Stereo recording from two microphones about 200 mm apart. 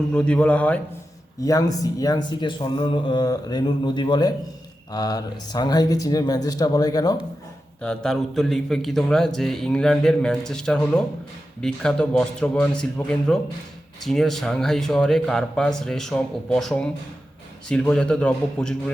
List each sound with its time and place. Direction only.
0.1 s a man's voice: 5° left (ahead or behind)
7.8 s a man's voice: 5° left (ahead or behind)